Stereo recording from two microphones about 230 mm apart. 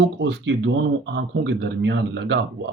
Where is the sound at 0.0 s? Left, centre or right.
Right.